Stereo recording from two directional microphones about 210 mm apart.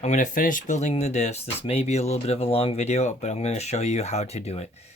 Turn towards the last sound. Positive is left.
turn(degrees=30)  # may be behind; listen again after turning